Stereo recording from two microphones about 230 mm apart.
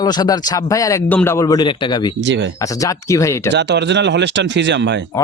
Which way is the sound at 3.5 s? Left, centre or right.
Right.